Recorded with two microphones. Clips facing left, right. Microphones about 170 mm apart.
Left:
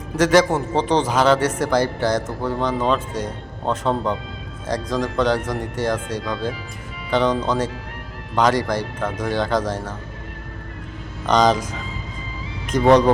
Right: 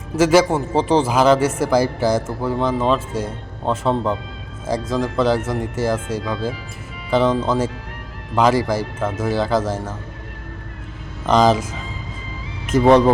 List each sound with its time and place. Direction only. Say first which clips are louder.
0.2 s a man's voice: right 1 dB; 10° right (ahead or behind)
11.3 s speech: right 2 dB; 5° right (ahead or behind)
12.6 s speech: right 2 dB; 5° right (ahead or behind)